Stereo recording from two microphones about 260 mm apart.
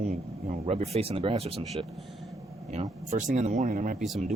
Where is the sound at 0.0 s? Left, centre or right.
Right.